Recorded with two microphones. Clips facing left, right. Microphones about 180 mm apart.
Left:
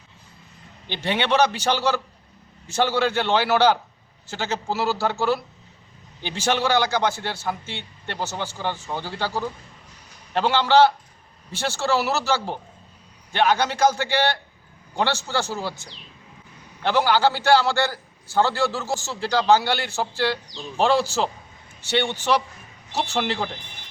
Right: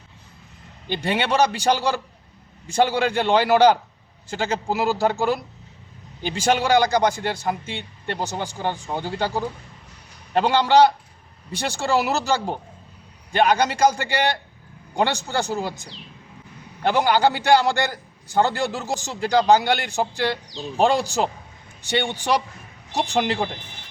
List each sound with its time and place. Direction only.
0.9 s a man's voice: 10° right (ahead or behind)
6.4 s a man's voice: 15° right (ahead or behind)